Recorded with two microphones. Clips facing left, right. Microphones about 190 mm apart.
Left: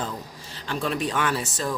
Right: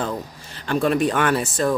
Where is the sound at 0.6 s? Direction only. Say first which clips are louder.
Right 8 dB; 55° right (ahead or behind).